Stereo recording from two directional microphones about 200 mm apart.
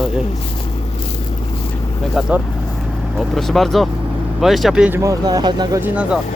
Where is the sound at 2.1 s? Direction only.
5° right (ahead or behind).